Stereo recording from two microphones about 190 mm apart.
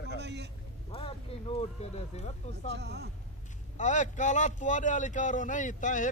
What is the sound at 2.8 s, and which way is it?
Speech, 60° right (ahead or behind).